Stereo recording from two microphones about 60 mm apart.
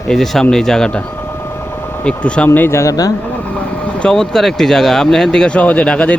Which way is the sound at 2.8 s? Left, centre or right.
Left.